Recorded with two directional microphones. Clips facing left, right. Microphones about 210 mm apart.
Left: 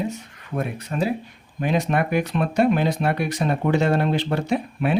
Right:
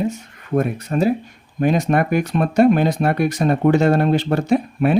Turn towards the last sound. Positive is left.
turn(degrees=-45)  # may be behind; listen again after turning